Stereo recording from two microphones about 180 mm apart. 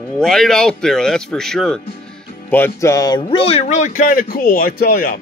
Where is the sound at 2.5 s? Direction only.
15° left (ahead or behind); by 5.2 s 50° left (ahead or behind).